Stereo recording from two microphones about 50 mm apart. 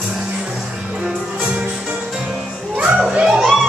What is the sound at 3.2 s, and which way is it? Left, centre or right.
Music, centre.